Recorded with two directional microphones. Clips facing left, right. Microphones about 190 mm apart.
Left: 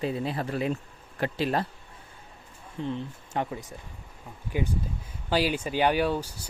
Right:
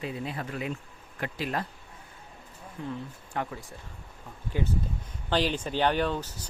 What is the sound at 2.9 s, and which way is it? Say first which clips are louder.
Speech: left 2 dB; 20° left (ahead or behind).